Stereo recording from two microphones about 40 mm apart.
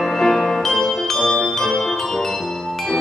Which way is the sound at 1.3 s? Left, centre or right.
Left.